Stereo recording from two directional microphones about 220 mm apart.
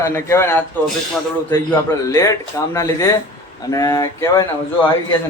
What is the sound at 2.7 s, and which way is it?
A man's voice, 15° left (ahead or behind).